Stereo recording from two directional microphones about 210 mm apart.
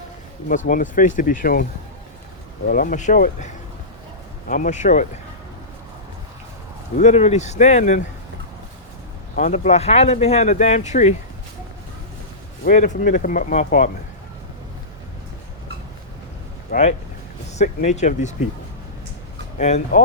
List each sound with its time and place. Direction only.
0.4 s speech: 40° left (ahead or behind)
2.6 s speech: 40° left (ahead or behind)
6.9 s speech: 35° left (ahead or behind)
9.3 s speech: 35° left (ahead or behind)
12.6 s speech: 35° left (ahead or behind)
16.7 s speech: 40° left (ahead or behind)
19.5 s speech: 35° left (ahead or behind)